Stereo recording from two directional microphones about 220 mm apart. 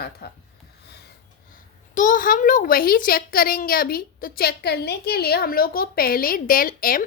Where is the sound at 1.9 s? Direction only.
35° left (ahead or behind).